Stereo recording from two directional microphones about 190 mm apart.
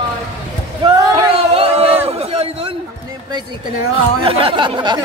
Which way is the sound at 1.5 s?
30° right (ahead or behind).